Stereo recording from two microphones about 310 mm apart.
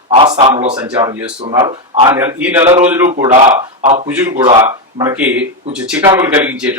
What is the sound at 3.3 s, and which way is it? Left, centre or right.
Speech, right.